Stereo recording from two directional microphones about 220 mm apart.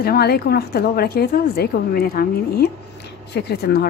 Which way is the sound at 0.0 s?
45° left (ahead or behind).